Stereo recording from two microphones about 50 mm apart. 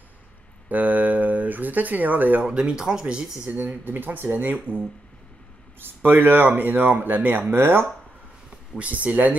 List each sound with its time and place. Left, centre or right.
0.7 s speech: right
2.4 s speech: centre
3.4 s speech: right
7.5 s speech: right
8.7 s speech: right